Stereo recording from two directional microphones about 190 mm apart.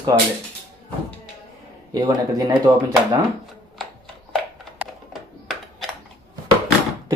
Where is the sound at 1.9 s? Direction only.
20° right (ahead or behind).